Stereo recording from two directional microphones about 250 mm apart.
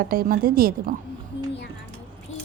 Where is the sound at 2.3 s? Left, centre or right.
Left.